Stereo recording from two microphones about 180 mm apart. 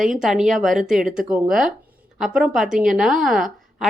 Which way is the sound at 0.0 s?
Centre (ahead or behind).